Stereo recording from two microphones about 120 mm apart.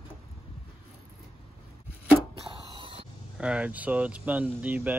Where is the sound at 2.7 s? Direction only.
45° right (ahead or behind).